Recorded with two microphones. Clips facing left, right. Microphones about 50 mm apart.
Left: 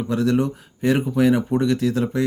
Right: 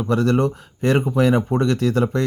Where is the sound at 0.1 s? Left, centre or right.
Right.